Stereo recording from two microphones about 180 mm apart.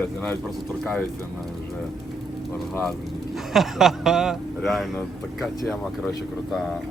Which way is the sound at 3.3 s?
Centre (ahead or behind).